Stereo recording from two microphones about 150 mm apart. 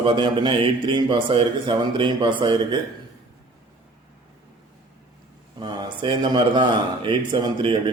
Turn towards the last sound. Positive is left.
turn(degrees=-35)  # may be behind; listen again after turning